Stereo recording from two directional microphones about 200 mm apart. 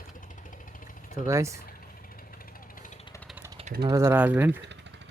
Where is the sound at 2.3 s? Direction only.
45° left (ahead or behind).